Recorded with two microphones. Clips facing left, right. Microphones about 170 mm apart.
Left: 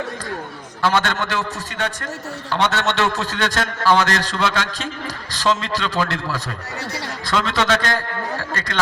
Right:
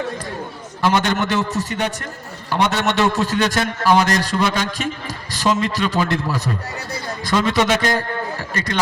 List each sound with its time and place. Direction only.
0.8 s a man's voice: 15° right (ahead or behind)